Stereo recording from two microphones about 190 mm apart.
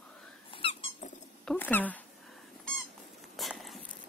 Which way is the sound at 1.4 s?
5° left (ahead or behind).